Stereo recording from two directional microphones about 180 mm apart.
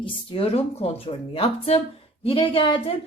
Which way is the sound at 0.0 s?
30° left (ahead or behind).